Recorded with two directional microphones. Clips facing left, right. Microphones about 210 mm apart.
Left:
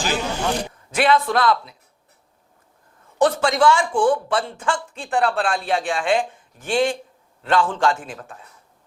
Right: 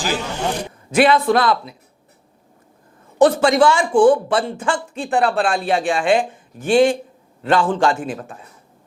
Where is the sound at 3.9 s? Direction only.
35° right (ahead or behind).